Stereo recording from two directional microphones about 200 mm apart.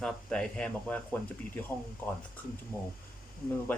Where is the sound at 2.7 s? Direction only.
10° left (ahead or behind).